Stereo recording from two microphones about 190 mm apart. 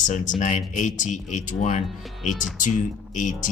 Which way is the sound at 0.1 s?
40° left (ahead or behind).